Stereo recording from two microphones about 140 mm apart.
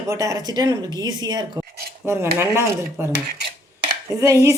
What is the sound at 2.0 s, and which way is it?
Speech, 15° right (ahead or behind).